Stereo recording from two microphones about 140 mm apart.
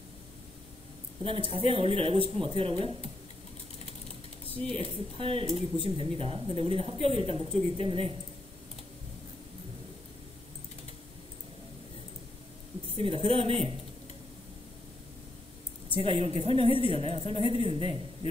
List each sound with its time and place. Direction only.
1.5 s speech: 40° right (ahead or behind)
4.6 s speech: 40° right (ahead or behind)
13.0 s speech: 40° right (ahead or behind)
16.0 s a woman's voice: 45° right (ahead or behind)